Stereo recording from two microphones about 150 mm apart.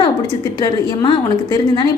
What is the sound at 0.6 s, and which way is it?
A woman's voice, 30° left (ahead or behind).